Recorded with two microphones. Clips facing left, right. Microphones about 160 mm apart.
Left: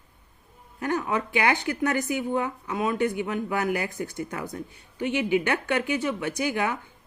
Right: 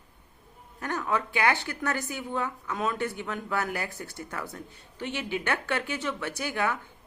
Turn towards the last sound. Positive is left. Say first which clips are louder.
# left 3 dB
turn(degrees=15)  # may be behind; listen again after turning